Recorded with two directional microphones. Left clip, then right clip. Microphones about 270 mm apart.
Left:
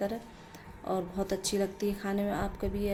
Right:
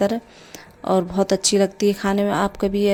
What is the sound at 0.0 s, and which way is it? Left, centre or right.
Speech, right.